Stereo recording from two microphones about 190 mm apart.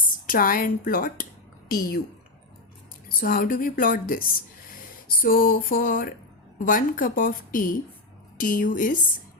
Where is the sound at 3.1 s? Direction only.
50° left (ahead or behind).